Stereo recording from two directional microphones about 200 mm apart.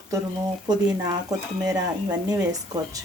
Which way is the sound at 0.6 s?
20° right (ahead or behind).